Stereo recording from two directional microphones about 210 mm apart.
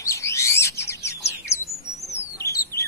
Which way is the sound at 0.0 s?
15° left (ahead or behind).